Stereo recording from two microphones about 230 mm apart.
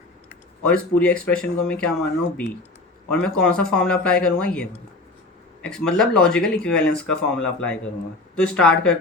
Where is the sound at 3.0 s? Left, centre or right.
Centre.